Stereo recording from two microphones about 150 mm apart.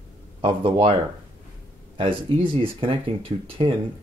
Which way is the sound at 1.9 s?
35° right (ahead or behind).